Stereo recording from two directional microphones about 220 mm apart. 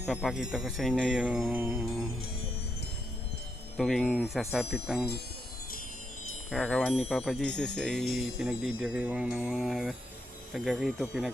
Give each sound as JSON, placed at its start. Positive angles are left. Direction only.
{"t": 0.0, "sound": "speech", "side_deg": 0}
{"t": 3.8, "sound": "speech", "side_deg": 0}
{"t": 6.5, "sound": "speech", "side_deg": 5}